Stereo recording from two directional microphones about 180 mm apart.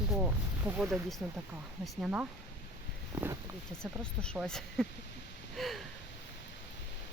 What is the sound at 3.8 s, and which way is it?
Speech, 5° left (ahead or behind).